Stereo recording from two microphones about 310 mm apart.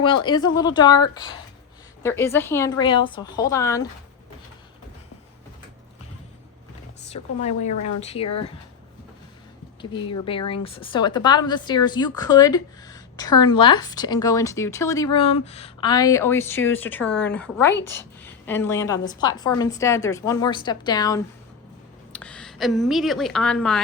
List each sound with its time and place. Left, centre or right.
0.0 s a woman's voice: centre
7.6 s speech: left
7.9 s speech: centre
10.2 s a woman's voice: centre